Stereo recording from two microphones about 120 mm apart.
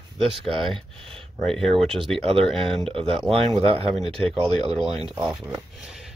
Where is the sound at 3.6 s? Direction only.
55° right (ahead or behind).